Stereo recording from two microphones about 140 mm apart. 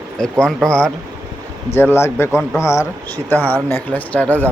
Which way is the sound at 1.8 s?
15° left (ahead or behind).